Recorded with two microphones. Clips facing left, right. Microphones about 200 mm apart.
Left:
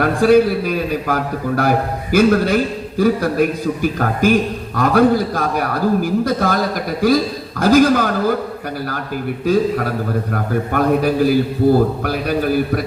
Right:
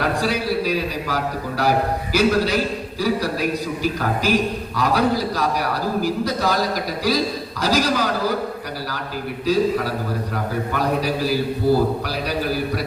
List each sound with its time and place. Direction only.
0.0 s a man's voice: 50° left (ahead or behind)
9.5 s a man's voice: 50° left (ahead or behind)